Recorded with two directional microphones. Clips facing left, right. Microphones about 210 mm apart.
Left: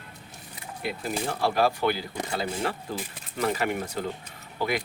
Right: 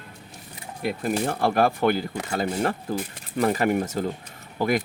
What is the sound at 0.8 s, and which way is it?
Speech, 55° right (ahead or behind).